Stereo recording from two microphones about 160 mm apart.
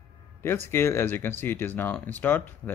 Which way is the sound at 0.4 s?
15° left (ahead or behind).